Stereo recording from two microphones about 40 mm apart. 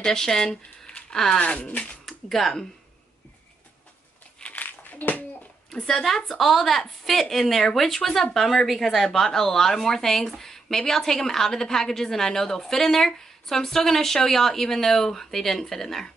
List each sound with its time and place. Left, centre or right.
0.0 s speech: centre
1.4 s speech: left
2.0 s speech: centre
4.4 s a sound: left
4.6 s a sound: left
6.0 s speech: centre
9.0 s speech: centre